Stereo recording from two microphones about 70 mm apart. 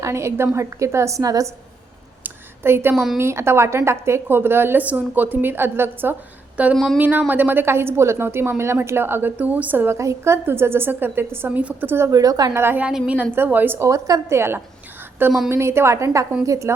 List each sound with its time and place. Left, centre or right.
0.0 s a woman's voice: right
2.2 s a sound: right
2.9 s a woman's voice: centre
3.2 s a woman's voice: right
6.7 s a woman's voice: centre
7.0 s a woman's voice: right
10.0 s a woman's voice: right
12.1 s a woman's voice: right
12.5 s a woman's voice: right
13.8 s a woman's voice: right